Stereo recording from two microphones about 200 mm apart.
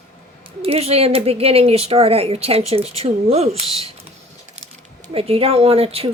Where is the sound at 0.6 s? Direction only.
30° right (ahead or behind).